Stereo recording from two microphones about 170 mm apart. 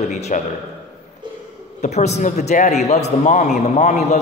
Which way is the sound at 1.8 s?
40° left (ahead or behind).